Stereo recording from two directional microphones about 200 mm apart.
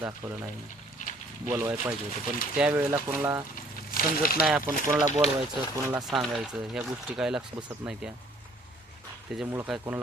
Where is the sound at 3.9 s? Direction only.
45° left (ahead or behind).